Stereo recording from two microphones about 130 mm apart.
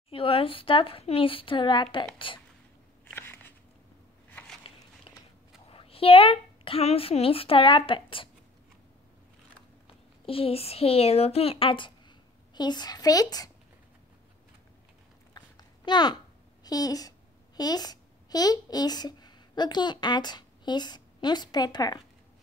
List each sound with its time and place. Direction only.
0.1 s a woman's voice: 45° left (ahead or behind)
3.1 s a sound: 15° left (ahead or behind)
5.1 s walk: 45° left (ahead or behind)
5.7 s a woman's voice: 45° left (ahead or behind)
10.2 s a woman's voice: 45° left (ahead or behind); by 13.5 s 30° left (ahead or behind)
15.3 s a sound: 35° left (ahead or behind)
16.6 s a woman's voice: 30° left (ahead or behind)